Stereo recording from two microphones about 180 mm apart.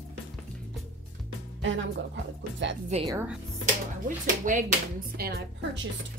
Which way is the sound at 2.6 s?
90° right.